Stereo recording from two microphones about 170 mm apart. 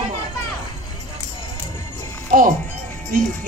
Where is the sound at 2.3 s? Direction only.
50° right (ahead or behind).